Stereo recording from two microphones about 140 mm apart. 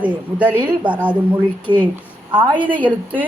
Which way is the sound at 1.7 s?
35° right (ahead or behind).